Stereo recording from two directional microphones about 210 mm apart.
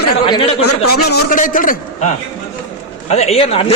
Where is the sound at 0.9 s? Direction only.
50° left (ahead or behind).